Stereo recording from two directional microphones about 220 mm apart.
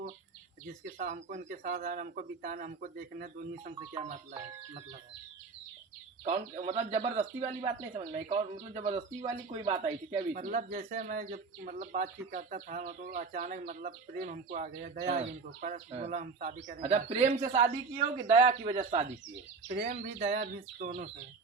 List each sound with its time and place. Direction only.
0.9 s speech: 35° right (ahead or behind)
6.2 s speech: 25° right (ahead or behind)
10.3 s speech: 35° right (ahead or behind)
16.6 s speech: 30° right (ahead or behind)
19.6 s speech: 40° right (ahead or behind)